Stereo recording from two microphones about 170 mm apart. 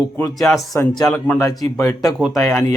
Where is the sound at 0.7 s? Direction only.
20° left (ahead or behind).